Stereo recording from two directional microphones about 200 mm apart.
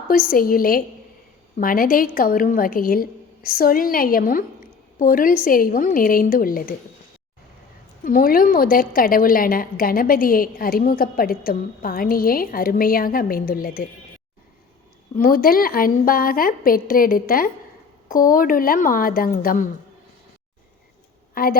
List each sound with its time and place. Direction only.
0.1 s a woman's voice: 45° left (ahead or behind)
8.0 s a woman's voice: 45° left (ahead or behind)
15.1 s a woman's voice: 45° left (ahead or behind)
21.3 s a woman's voice: 45° left (ahead or behind)